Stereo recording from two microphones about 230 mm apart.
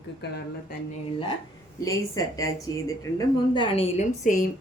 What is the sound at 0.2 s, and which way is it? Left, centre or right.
Speech, left.